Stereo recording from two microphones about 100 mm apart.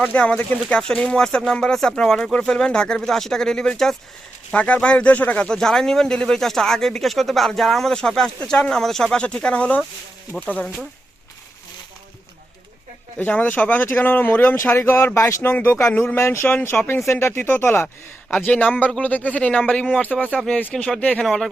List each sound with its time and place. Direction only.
0.0 s speech: 10° left (ahead or behind)
13.1 s speech: 15° left (ahead or behind)
20.1 s speech: centre (ahead or behind)
20.5 s speech: 15° left (ahead or behind)